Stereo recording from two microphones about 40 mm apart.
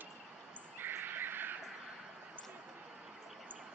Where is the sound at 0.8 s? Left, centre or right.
Right.